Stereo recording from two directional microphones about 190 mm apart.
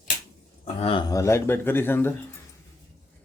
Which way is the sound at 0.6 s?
30° left (ahead or behind).